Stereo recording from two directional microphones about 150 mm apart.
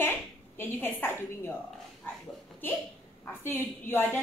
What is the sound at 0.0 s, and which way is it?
A woman's voice, 15° left (ahead or behind).